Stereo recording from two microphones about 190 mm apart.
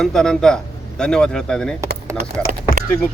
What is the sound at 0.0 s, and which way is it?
A man's voice, 5° left (ahead or behind).